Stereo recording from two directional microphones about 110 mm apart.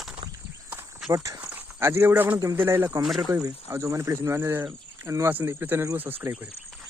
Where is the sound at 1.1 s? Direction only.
30° right (ahead or behind).